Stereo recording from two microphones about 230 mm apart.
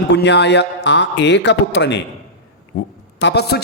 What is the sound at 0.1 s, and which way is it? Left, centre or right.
A man's voice, left.